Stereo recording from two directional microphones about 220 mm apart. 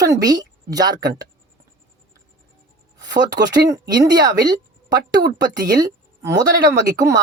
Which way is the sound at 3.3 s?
15° right (ahead or behind).